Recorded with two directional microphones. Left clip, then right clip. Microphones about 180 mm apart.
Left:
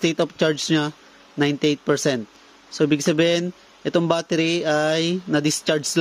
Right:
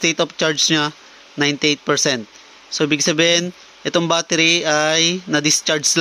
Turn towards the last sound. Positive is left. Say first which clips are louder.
# right 4 dB
turn(degrees=20)  # may be behind; listen again after turning